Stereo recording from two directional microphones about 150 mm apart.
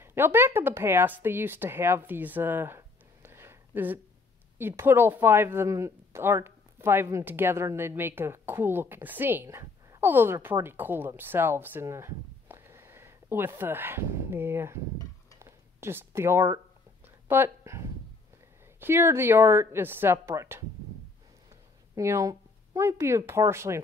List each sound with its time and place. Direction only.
0.0 s speech: 15° right (ahead or behind)
15.3 s a sound: 15° right (ahead or behind)
17.3 s speech: 15° right (ahead or behind)
21.9 s speech: 20° right (ahead or behind)